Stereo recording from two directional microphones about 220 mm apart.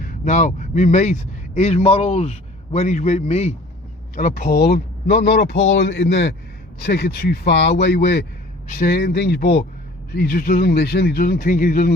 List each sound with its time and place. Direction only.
0.0 s a man's voice: 35° left (ahead or behind)